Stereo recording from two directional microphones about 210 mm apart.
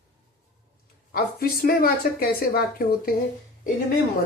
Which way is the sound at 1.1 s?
45° left (ahead or behind).